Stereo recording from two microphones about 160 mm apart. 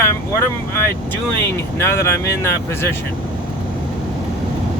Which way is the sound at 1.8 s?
15° left (ahead or behind).